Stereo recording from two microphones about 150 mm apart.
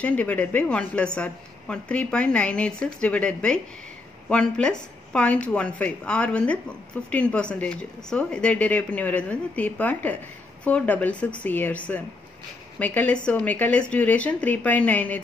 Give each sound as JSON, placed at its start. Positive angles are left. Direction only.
{"t": 0.0, "sound": "a woman's voice", "side_deg": 10}